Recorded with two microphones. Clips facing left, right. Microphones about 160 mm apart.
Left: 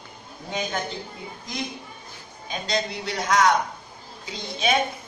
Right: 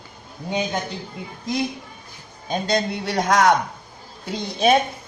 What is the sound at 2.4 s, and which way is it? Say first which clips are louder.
A man's voice: right 5 dB; 50° right (ahead or behind).